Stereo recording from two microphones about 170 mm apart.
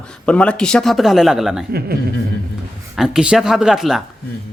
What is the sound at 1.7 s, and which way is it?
Speech, 65° right (ahead or behind).